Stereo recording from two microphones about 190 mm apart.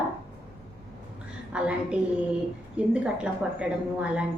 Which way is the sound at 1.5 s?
5° right (ahead or behind).